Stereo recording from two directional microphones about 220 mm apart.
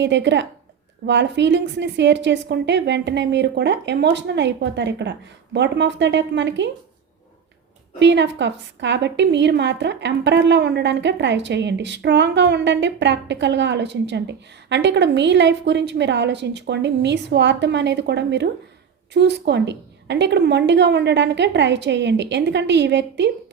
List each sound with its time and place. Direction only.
0.0 s a woman's voice: 55° right (ahead or behind)
7.9 s a woman's voice: 55° right (ahead or behind)